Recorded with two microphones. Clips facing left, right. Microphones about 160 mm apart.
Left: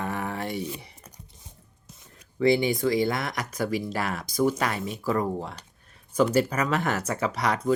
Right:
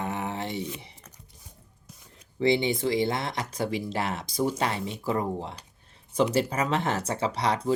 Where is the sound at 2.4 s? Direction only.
25° right (ahead or behind).